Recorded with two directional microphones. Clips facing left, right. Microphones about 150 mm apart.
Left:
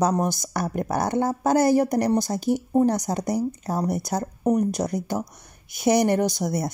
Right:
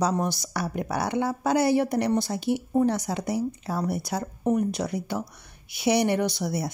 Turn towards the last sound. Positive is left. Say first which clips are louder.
# left 3 dB
turn(degrees=45)  # may be behind; listen again after turning